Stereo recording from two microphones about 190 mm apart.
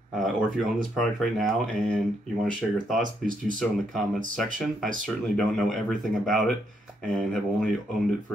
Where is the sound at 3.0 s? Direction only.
45° right (ahead or behind).